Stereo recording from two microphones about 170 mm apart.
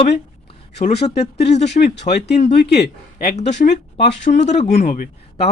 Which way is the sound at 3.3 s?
45° left (ahead or behind).